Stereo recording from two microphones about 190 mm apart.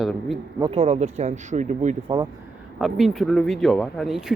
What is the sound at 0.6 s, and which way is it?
Speech, 30° right (ahead or behind).